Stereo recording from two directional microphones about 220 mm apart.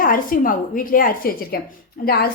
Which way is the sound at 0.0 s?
40° left (ahead or behind).